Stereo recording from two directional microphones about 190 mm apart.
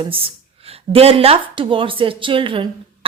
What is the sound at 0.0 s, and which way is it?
Speech, 30° right (ahead or behind).